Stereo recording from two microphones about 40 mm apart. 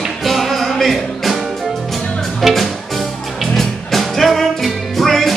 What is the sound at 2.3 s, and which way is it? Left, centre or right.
Music, centre.